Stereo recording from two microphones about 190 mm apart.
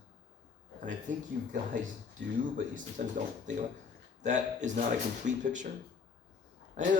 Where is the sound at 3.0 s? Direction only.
45° right (ahead or behind).